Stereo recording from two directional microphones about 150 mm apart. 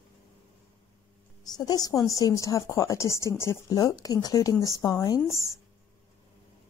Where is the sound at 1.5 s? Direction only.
25° left (ahead or behind).